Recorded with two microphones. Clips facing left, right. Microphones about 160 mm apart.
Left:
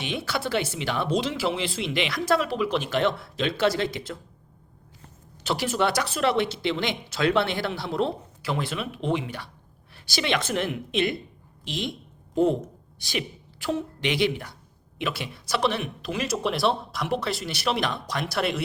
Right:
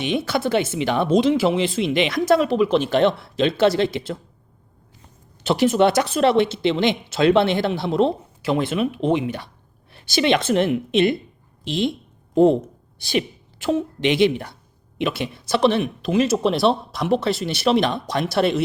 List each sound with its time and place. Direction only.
0.0 s speech: 20° right (ahead or behind)
5.4 s speech: 25° right (ahead or behind)
13.0 s a woman's voice: 30° right (ahead or behind)